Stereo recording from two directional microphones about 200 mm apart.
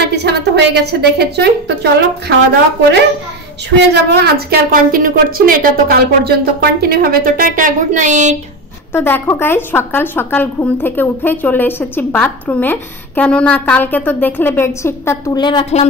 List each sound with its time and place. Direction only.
0.0 s a woman's voice: 55° right (ahead or behind)
3.9 s a woman's voice: 55° right (ahead or behind); by 8.4 s 40° right (ahead or behind)
8.9 s a woman's voice: 10° left (ahead or behind)